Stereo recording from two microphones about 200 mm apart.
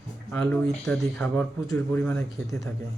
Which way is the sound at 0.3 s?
5° left (ahead or behind).